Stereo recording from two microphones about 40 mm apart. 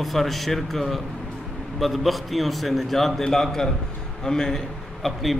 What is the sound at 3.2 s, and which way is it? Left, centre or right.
A man's voice, centre.